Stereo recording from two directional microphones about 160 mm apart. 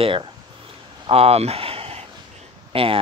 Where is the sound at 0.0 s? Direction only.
35° right (ahead or behind).